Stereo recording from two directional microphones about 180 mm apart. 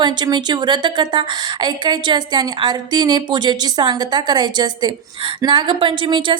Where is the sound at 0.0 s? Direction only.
25° right (ahead or behind).